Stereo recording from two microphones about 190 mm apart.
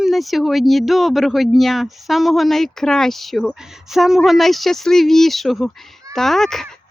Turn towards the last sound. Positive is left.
turn(degrees=0)  # may be behind; listen again after turning